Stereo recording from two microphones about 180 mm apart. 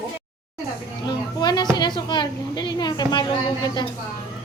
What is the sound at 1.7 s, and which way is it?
A woman's voice, 25° left (ahead or behind).